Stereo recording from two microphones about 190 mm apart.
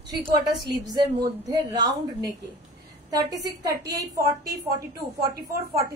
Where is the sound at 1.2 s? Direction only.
20° right (ahead or behind).